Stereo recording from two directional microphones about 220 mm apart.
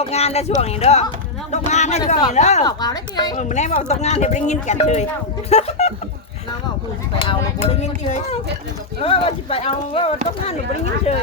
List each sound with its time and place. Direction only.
0.0 s speech: 30° left (ahead or behind)
2.6 s a woman's voice: 15° left (ahead or behind)
3.3 s speech: 30° left (ahead or behind)
7.2 s speech: 25° left (ahead or behind)